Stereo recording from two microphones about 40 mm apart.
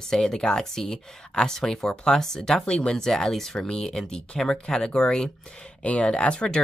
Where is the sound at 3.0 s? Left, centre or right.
Centre.